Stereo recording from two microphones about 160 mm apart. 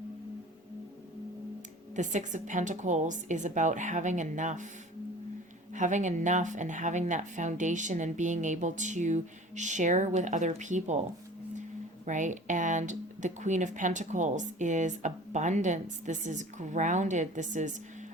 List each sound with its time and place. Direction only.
2.0 s speech: 50° right (ahead or behind)
5.7 s speech: 50° right (ahead or behind)
12.0 s speech: 50° right (ahead or behind)